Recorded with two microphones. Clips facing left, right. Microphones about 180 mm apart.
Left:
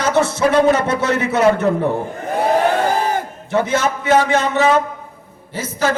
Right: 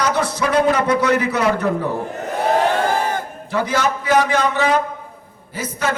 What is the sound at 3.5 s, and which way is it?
A man's voice, 25° left (ahead or behind).